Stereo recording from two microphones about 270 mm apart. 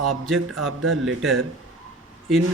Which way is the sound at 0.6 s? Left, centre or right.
Right.